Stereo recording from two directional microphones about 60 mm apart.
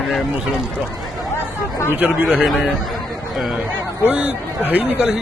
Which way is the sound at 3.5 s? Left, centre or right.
Right.